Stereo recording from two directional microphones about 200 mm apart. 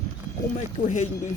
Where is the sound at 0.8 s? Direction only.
40° left (ahead or behind).